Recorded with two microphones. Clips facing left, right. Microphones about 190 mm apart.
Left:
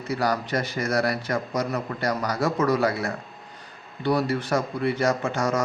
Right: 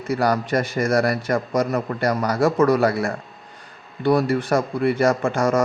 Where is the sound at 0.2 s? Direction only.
50° right (ahead or behind).